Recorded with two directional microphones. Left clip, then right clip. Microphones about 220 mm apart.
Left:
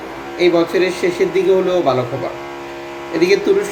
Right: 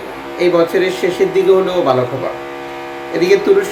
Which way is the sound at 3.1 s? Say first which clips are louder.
Right 2 dB; 5° right (ahead or behind).